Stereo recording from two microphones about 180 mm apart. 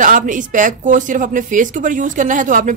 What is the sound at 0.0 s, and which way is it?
A woman's voice, 45° right (ahead or behind).